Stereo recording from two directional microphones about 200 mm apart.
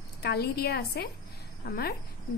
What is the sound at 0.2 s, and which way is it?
A woman's voice, 55° left (ahead or behind).